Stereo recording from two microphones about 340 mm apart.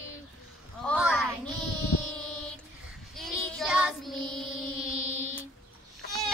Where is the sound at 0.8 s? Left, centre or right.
Centre.